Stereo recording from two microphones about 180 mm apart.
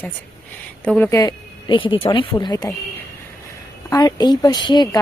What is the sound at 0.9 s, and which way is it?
Speech, 10° left (ahead or behind).